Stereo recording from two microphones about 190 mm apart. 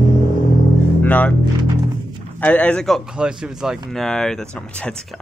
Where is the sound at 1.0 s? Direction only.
10° left (ahead or behind).